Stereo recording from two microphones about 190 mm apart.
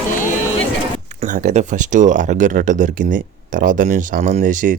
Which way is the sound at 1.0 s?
35° right (ahead or behind).